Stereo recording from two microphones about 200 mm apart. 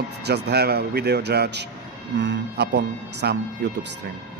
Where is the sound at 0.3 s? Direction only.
55° right (ahead or behind).